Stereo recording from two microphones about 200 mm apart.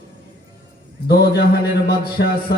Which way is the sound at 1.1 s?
50° left (ahead or behind).